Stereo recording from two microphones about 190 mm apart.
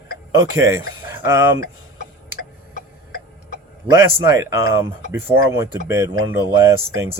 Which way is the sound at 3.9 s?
15° right (ahead or behind).